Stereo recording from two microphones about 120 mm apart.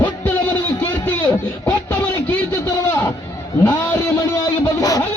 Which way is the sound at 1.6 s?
15° left (ahead or behind).